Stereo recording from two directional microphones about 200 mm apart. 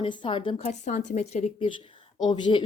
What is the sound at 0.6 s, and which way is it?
Speech, 35° left (ahead or behind).